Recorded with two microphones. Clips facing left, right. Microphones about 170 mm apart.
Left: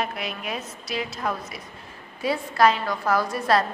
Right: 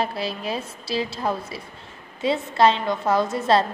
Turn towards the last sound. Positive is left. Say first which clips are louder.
# right 2 dB
turn(degrees=-25)  # may be behind; listen again after turning